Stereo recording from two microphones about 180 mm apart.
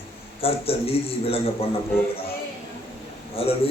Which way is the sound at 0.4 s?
35° left (ahead or behind).